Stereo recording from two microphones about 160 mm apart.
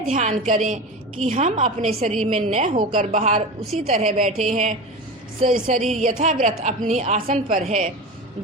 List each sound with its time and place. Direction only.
0.0 s a woman's voice: 50° right (ahead or behind)